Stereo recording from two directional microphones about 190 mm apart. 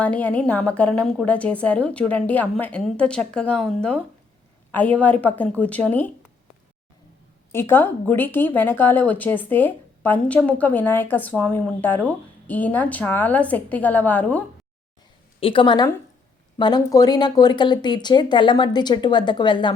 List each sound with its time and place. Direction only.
0.0 s a woman's voice: 5° left (ahead or behind)
7.5 s a woman's voice: 10° left (ahead or behind)
15.4 s speech: 25° left (ahead or behind)